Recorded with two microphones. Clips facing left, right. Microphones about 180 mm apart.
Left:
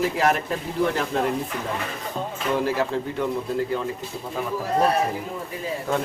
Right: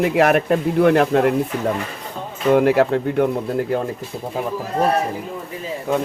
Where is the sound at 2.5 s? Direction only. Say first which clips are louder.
Right 9 dB; 65° right (ahead or behind).